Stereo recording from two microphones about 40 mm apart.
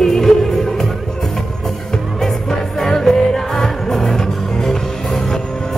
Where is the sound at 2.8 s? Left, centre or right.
Centre.